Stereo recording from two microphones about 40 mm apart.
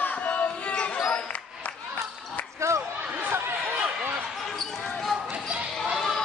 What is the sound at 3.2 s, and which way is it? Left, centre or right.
Chatter, right.